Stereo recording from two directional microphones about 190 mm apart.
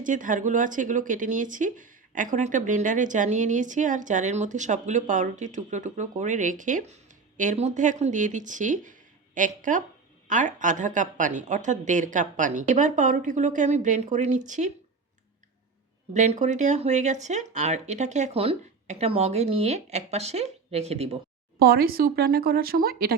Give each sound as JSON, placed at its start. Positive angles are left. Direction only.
{"t": 0.0, "sound": "speech", "side_deg": -45}
{"t": 16.1, "sound": "speech", "side_deg": -35}
{"t": 21.6, "sound": "speech", "side_deg": -55}